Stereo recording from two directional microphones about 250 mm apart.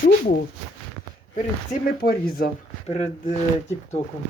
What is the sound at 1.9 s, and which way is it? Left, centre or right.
Speech, left.